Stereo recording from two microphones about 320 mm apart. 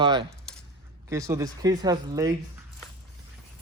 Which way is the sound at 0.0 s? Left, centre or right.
Centre.